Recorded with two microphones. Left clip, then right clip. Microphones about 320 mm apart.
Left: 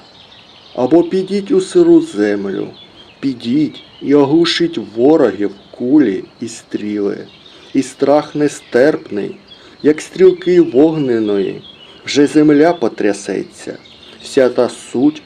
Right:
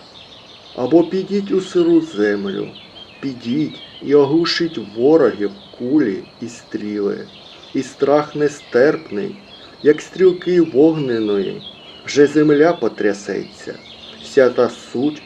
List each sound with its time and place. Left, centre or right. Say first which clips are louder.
0.8 s speech: left 3 dB; left